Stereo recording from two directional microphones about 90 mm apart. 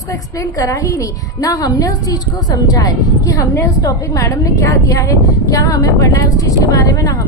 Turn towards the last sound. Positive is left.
turn(degrees=40)  # may be behind; listen again after turning